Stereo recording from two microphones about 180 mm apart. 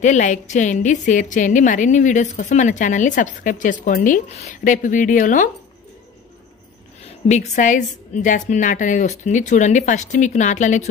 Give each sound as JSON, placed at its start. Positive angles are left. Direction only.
{"t": 0.0, "sound": "a woman's voice", "side_deg": 40}
{"t": 7.2, "sound": "a woman's voice", "side_deg": 40}